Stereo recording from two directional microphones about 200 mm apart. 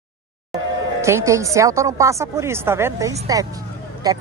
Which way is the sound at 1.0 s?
15° right (ahead or behind).